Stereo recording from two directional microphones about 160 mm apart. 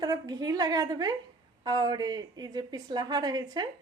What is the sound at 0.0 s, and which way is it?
Speech, 25° right (ahead or behind).